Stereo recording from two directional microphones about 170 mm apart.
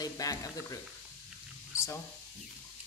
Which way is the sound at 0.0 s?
20° left (ahead or behind).